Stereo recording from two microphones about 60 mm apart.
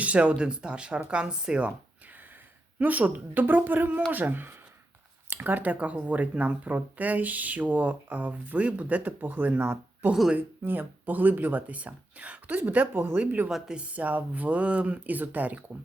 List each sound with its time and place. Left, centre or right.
0.0 s speech: right
2.7 s speech: right